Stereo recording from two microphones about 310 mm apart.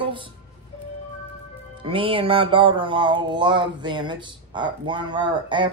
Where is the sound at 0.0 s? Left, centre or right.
Centre.